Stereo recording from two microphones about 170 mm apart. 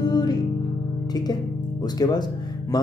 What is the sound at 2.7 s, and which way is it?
Speech, 25° left (ahead or behind).